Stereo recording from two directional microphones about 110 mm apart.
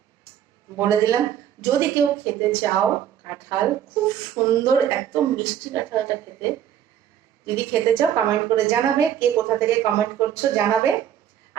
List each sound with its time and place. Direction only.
0.8 s a woman's voice: 30° right (ahead or behind)